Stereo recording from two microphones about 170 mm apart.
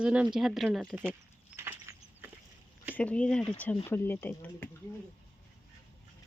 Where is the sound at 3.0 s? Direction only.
5° left (ahead or behind).